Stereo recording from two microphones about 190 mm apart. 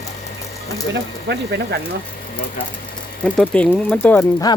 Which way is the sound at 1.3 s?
60° right (ahead or behind).